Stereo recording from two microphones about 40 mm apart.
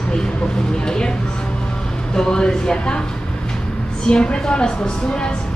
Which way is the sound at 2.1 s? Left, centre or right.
Left.